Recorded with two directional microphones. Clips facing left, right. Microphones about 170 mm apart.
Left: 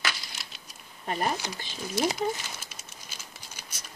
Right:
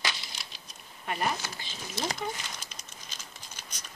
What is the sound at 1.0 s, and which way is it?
Speech, 35° left (ahead or behind).